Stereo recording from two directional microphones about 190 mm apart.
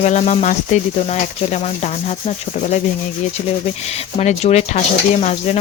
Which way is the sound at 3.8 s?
35° left (ahead or behind).